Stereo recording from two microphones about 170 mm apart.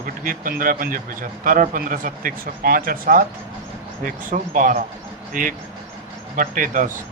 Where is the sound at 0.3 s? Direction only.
55° right (ahead or behind).